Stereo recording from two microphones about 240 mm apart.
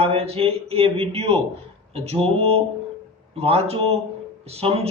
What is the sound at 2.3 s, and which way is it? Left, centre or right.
A man's voice, right.